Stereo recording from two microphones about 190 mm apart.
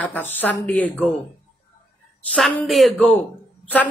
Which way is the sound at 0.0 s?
10° left (ahead or behind).